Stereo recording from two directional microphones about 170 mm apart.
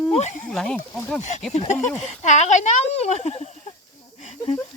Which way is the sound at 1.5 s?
40° left (ahead or behind).